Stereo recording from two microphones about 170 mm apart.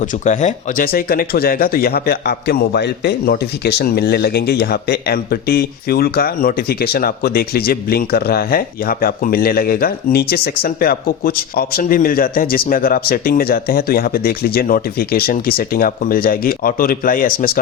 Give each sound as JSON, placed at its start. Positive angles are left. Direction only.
{"t": 0.0, "sound": "speech", "side_deg": 45}
{"t": 0.9, "sound": "a man's voice", "side_deg": 60}